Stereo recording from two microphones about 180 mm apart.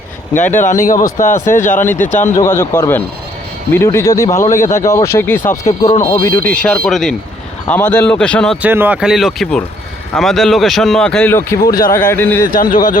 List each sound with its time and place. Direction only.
0.5 s speech: 45° left (ahead or behind)
2.4 s speech: 15° left (ahead or behind)
8.6 s speech: 10° right (ahead or behind); by 12.5 s 10° left (ahead or behind)
12.7 s speech: 50° left (ahead or behind)